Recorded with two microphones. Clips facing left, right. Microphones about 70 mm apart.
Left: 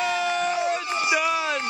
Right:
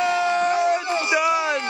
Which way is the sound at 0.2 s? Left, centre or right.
Centre.